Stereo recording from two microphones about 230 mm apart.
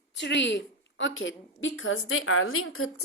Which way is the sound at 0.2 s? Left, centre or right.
Left.